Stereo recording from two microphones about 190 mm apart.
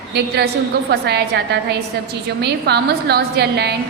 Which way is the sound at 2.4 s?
60° right (ahead or behind).